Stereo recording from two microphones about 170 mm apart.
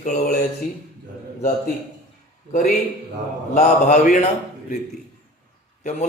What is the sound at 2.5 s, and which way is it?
A man's voice, 50° left (ahead or behind).